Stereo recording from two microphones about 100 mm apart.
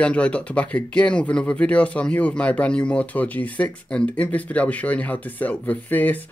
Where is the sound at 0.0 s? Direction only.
15° left (ahead or behind).